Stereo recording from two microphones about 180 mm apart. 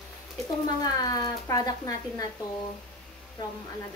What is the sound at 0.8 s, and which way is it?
Speech, 20° left (ahead or behind).